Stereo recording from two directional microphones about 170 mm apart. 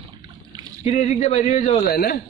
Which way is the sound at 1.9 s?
60° left (ahead or behind).